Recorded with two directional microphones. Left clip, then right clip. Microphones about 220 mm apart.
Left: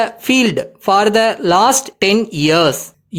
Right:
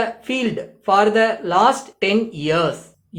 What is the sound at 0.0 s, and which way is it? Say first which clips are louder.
Speech: left 7 dB; 50° left (ahead or behind).